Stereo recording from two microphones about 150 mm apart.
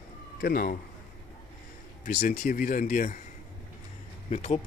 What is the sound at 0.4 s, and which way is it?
Speech, 85° left.